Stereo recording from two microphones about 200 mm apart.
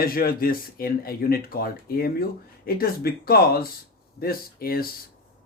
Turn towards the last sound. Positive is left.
turn(degrees=50)  # may be behind; listen again after turning